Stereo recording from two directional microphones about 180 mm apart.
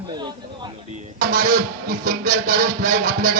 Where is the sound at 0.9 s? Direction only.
45° right (ahead or behind).